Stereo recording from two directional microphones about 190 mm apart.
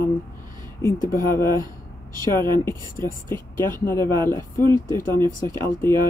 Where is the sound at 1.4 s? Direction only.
15° left (ahead or behind).